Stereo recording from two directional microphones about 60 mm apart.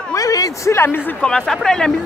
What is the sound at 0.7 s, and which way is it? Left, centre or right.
Speech, left.